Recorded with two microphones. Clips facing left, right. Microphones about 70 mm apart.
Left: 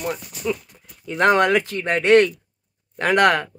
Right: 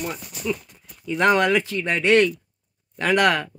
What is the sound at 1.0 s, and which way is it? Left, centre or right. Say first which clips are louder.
Speech: left 2 dB; left.